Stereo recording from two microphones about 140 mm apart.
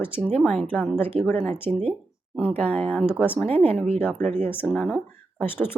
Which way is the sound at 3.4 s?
45° right (ahead or behind).